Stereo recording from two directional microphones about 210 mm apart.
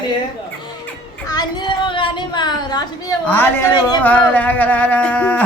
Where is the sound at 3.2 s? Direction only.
10° left (ahead or behind).